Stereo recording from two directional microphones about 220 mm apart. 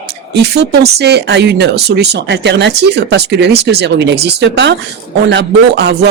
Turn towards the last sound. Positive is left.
turn(degrees=-50)  # may be behind; listen again after turning